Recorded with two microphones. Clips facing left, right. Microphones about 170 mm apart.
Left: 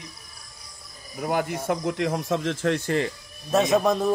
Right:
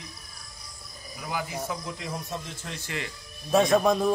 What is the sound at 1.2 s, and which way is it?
Speech, 55° left (ahead or behind).